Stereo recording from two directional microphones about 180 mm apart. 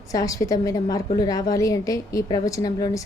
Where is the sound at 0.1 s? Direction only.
20° left (ahead or behind).